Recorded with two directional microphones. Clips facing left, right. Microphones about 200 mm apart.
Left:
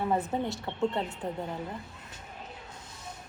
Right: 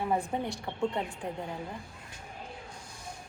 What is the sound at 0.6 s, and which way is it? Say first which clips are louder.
Speech: left 2 dB; 15° right (ahead or behind).